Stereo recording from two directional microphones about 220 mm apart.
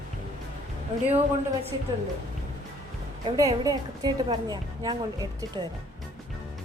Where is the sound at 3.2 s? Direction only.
15° right (ahead or behind).